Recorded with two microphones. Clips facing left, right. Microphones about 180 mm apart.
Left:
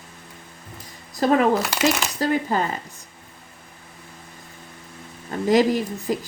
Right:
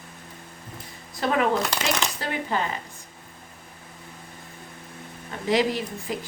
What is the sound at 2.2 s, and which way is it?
Speech, 40° left (ahead or behind).